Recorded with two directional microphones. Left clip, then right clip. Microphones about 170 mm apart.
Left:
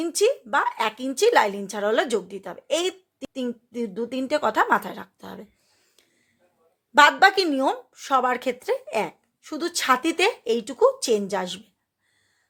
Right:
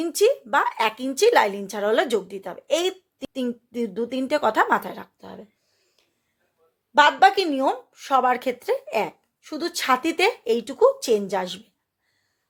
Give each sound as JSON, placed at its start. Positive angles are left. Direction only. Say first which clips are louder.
{"t": 0.0, "sound": "a woman's voice", "louder": "right 2 dB", "side_deg": -5}
{"t": 5.1, "sound": "speech", "louder": "left 1 dB", "side_deg": 15}
{"t": 6.9, "sound": "a woman's voice", "louder": "even", "side_deg": 15}